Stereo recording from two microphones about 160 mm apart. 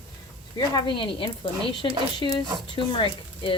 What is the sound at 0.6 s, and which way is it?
Speech, 30° left (ahead or behind).